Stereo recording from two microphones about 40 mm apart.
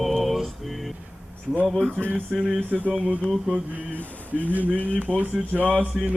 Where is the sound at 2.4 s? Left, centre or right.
Right.